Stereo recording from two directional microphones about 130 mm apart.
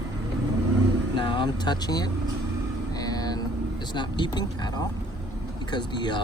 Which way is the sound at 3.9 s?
35° left (ahead or behind).